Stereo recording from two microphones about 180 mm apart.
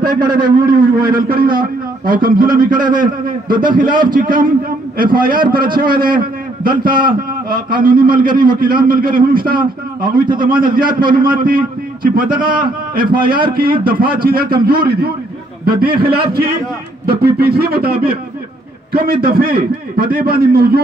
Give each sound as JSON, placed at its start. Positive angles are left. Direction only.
{"t": 0.0, "sound": "a man's voice", "side_deg": -55}
{"t": 10.3, "sound": "a man's voice", "side_deg": -25}
{"t": 10.7, "sound": "a man's voice", "side_deg": -50}
{"t": 19.2, "sound": "speech", "side_deg": -55}